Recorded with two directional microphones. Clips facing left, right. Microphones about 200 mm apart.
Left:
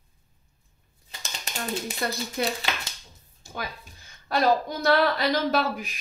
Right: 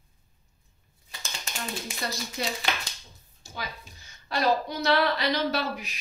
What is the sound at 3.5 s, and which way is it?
A woman's voice, 50° left (ahead or behind).